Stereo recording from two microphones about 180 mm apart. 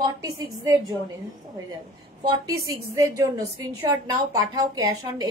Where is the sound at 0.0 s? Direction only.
20° right (ahead or behind).